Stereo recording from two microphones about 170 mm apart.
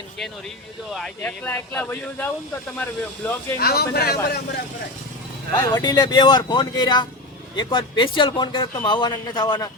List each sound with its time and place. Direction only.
1.2 s speech: 15° left (ahead or behind)
3.6 s a man's voice: 65° left (ahead or behind)
5.6 s speech: 20° left (ahead or behind)